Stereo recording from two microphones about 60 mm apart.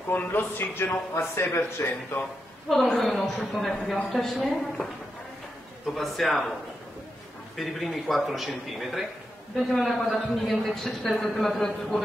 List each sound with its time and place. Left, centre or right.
0.1 s a man's voice: left
3.0 s a man's voice: centre
5.9 s a man's voice: centre
7.5 s a man's voice: centre